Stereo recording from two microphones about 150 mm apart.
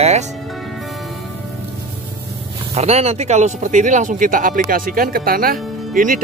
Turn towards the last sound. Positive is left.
turn(degrees=-65)  # may be behind; listen again after turning